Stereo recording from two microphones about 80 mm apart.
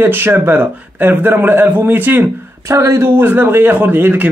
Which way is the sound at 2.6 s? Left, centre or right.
Right.